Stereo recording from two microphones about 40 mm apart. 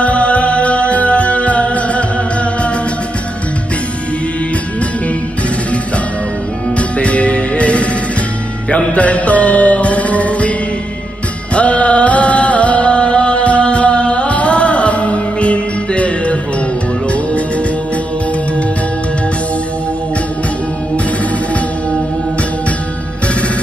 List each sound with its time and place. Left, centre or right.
0.0 s music: left
7.0 s music: left
11.5 s music: left